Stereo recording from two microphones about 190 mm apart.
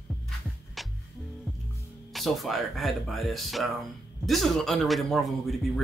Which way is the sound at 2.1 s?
Centre (ahead or behind).